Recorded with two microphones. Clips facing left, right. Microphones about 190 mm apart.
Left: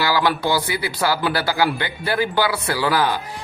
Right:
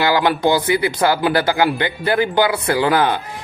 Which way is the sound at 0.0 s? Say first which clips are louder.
Right 4 dB; 20° right (ahead or behind).